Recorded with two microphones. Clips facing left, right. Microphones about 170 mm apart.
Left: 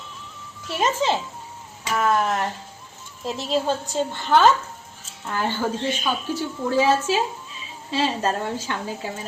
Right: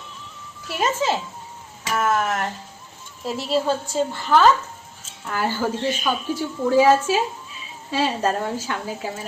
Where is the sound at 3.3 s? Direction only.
5° right (ahead or behind).